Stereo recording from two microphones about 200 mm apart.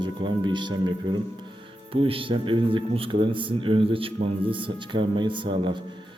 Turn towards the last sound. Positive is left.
turn(degrees=-25)  # may be behind; listen again after turning